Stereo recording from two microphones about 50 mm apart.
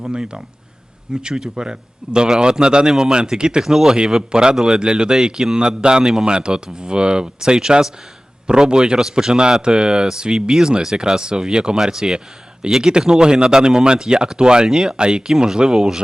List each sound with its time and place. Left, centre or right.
0.0 s a man's voice: centre